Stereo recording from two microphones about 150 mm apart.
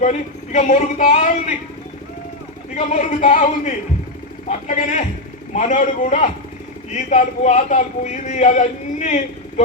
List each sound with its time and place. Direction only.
0.0 s speech: 55° left (ahead or behind)
2.7 s a man's voice: 50° left (ahead or behind)